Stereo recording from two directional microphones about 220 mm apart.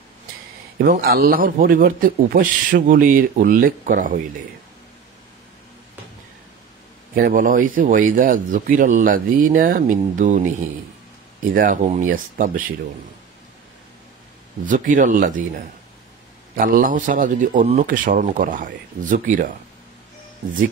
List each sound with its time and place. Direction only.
0.7 s a man's voice: 40° right (ahead or behind)
7.2 s a man's voice: 35° right (ahead or behind)
11.5 s a man's voice: 35° right (ahead or behind)
14.7 s a man's voice: 35° right (ahead or behind)
16.5 s a man's voice: 40° right (ahead or behind)